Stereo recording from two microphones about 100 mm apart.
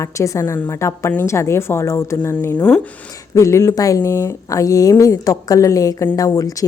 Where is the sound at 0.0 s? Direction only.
30° left (ahead or behind).